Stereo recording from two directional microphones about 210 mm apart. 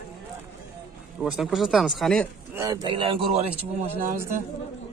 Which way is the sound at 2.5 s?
15° right (ahead or behind).